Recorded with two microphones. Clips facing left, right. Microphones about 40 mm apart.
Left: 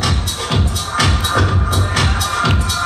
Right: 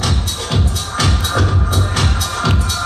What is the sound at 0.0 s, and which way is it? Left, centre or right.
Music, centre.